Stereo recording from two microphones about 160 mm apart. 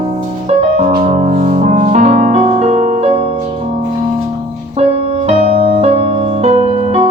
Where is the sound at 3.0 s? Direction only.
35° right (ahead or behind).